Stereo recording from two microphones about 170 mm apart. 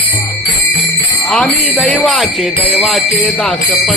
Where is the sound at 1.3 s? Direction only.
10° left (ahead or behind).